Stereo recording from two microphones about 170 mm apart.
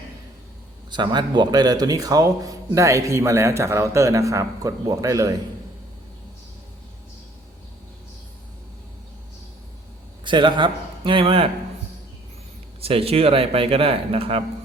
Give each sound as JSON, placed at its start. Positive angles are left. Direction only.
{"t": 0.9, "sound": "speech", "side_deg": -25}
{"t": 10.2, "sound": "speech", "side_deg": -30}
{"t": 12.8, "sound": "speech", "side_deg": -35}